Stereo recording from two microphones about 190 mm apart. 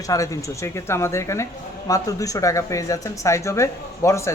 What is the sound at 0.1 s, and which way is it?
Speech, 15° left (ahead or behind).